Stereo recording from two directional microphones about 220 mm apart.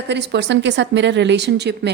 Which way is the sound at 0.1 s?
50° right (ahead or behind).